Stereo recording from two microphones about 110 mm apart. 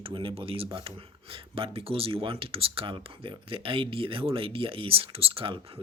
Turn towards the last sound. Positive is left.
turn(degrees=-55)  # may be behind; listen again after turning